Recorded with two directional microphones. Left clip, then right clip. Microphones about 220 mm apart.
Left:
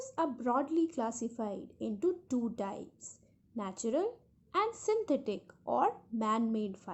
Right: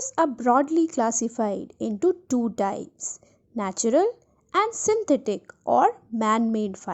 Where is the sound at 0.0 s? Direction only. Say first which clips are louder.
Right 12 dB; 35° right (ahead or behind).